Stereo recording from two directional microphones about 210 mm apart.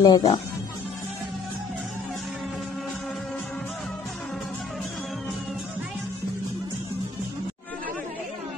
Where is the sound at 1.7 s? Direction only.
Centre (ahead or behind).